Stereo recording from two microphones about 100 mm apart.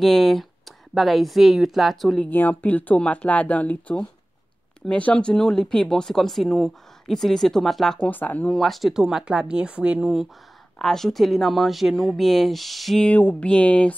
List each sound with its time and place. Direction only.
0.0 s speech: 5° left (ahead or behind)
2.2 s speech: 20° left (ahead or behind)
8.1 s speech: 15° left (ahead or behind)
8.5 s speech: centre (ahead or behind)
10.8 s speech: 5° left (ahead or behind)
13.1 s speech: 15° left (ahead or behind)